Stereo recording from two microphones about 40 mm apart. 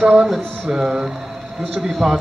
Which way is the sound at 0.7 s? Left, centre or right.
Right.